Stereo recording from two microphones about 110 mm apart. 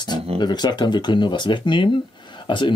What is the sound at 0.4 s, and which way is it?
Speech, 40° left (ahead or behind).